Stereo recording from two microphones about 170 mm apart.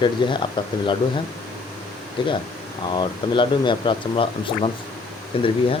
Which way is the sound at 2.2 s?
30° left (ahead or behind).